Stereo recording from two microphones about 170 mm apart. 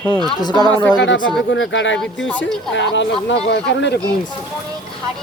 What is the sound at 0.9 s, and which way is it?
Speech, 90° left.